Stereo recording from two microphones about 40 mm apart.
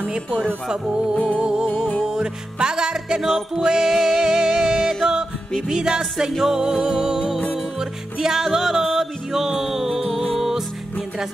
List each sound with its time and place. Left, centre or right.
0.1 s speech: right
1.3 s music: right